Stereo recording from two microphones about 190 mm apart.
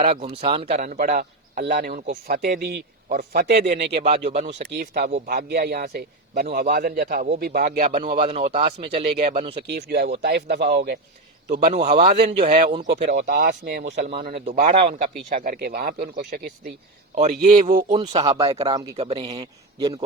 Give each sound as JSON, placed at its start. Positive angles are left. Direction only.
{"t": 0.0, "sound": "a man's voice", "side_deg": -35}
{"t": 3.9, "sound": "speech", "side_deg": -35}
{"t": 4.8, "sound": "a man's voice", "side_deg": -50}
{"t": 7.8, "sound": "speech", "side_deg": -35}
{"t": 9.6, "sound": "a man's voice", "side_deg": -60}
{"t": 11.7, "sound": "speech", "side_deg": -35}
{"t": 12.9, "sound": "a man's voice", "side_deg": -55}
{"t": 14.5, "sound": "a man's voice", "side_deg": -35}
{"t": 17.9, "sound": "a man's voice", "side_deg": -25}